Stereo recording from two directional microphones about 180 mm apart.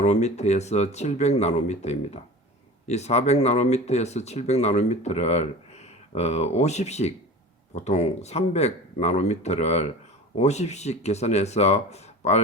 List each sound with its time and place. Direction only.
0.0 s speech: 40° left (ahead or behind)